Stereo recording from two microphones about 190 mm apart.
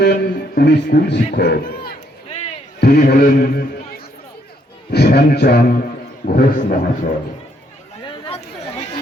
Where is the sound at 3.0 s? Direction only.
50° left (ahead or behind).